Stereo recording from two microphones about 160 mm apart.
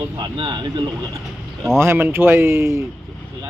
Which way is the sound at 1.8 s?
15° right (ahead or behind).